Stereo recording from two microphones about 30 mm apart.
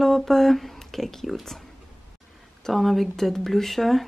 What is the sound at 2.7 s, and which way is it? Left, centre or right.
Speech, centre.